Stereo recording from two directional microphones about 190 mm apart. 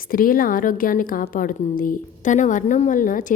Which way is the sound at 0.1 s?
50° left (ahead or behind).